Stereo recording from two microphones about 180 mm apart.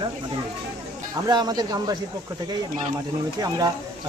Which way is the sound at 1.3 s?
20° right (ahead or behind).